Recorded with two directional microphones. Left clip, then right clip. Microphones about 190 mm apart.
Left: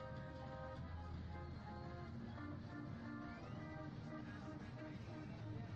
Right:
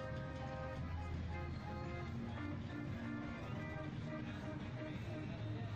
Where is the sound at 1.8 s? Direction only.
45° right (ahead or behind).